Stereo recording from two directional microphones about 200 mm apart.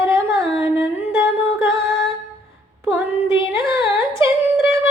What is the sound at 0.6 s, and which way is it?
Singing, 15° right (ahead or behind).